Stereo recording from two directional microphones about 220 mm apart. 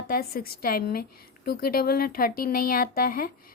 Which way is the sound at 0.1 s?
45° left (ahead or behind).